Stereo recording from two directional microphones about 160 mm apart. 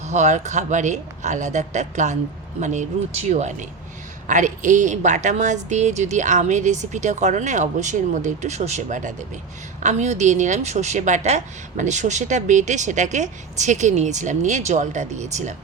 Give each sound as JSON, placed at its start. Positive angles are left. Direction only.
{"t": 0.0, "sound": "speech", "side_deg": -45}